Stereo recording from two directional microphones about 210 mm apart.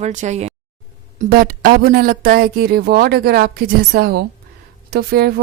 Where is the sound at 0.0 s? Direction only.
35° right (ahead or behind).